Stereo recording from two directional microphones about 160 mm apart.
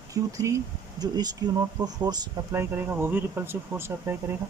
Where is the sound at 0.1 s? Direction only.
20° right (ahead or behind).